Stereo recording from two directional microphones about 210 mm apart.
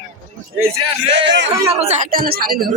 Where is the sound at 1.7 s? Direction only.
30° right (ahead or behind).